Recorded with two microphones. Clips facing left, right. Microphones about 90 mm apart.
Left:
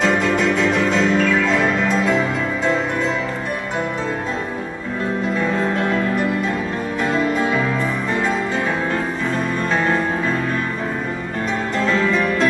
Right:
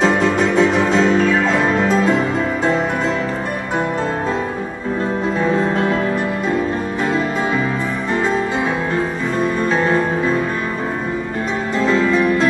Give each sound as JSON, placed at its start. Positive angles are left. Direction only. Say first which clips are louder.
{"t": 0.0, "sound": "music", "louder": "right 2 dB", "side_deg": -30}
{"t": 11.8, "sound": "music", "louder": "right 4 dB", "side_deg": -15}